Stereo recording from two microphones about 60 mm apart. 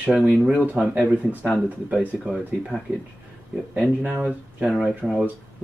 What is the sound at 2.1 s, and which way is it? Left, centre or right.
Speech, centre.